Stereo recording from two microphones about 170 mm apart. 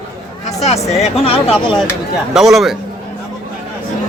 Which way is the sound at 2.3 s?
Centre (ahead or behind).